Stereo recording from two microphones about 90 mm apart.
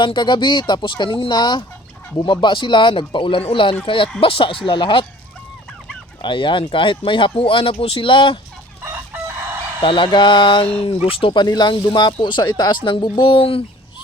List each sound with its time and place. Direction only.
0.0 s speech: 60° left (ahead or behind)
6.2 s speech: 65° left (ahead or behind)
8.8 s chicken: 25° right (ahead or behind)
9.8 s speech: 65° left (ahead or behind); by 11.4 s 85° left
11.4 s speech: 55° left (ahead or behind); by 13.7 s 90° left